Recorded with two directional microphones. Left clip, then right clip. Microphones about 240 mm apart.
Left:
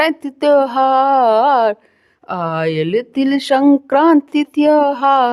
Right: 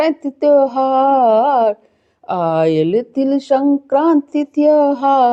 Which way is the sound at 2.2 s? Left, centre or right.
Centre.